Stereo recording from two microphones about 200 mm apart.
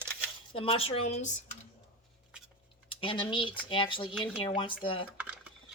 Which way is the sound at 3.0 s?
25° left (ahead or behind).